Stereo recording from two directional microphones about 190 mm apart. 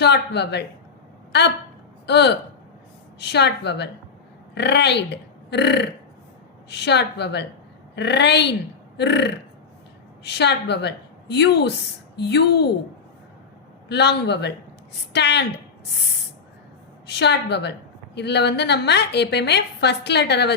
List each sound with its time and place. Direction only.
0.0 s a woman's voice: 60° left (ahead or behind)
13.8 s a woman's voice: 60° left (ahead or behind)
17.1 s a woman's voice: 60° left (ahead or behind)